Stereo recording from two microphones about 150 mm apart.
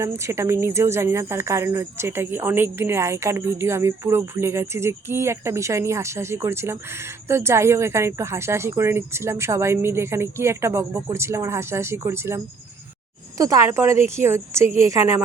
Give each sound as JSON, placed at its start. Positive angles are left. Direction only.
{"t": 0.0, "sound": "a woman's voice", "side_deg": -20}